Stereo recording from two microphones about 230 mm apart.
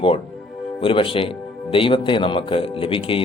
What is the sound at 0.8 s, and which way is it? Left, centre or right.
A man's voice, left.